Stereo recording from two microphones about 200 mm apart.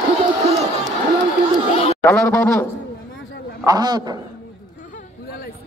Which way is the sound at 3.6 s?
20° right (ahead or behind).